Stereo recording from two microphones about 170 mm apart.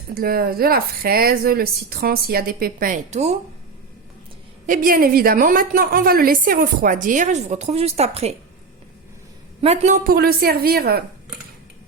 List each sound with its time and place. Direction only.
0.1 s speech: 60° right (ahead or behind); by 3.3 s 40° right (ahead or behind)
4.6 s a woman's voice: 55° right (ahead or behind)
9.6 s speech: 40° right (ahead or behind); by 11.0 s 65° right (ahead or behind)